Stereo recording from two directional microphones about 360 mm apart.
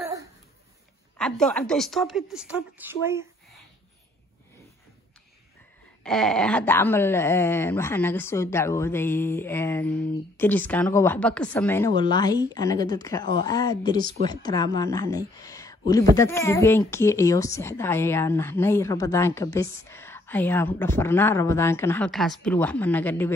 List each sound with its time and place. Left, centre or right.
1.1 s a woman's voice: centre
6.0 s speech: centre
13.2 s speech: right
13.5 s a woman's voice: centre